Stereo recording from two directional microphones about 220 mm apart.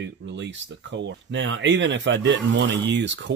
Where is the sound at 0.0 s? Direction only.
55° right (ahead or behind).